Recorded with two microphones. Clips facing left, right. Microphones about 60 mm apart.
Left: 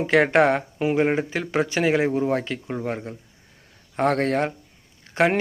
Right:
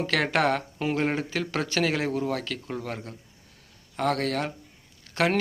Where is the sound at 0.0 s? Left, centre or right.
Left.